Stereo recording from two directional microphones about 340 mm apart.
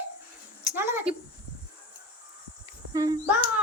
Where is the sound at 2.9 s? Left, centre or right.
Centre.